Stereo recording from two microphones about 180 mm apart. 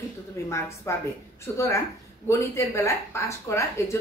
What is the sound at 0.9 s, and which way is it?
Speech, 15° left (ahead or behind).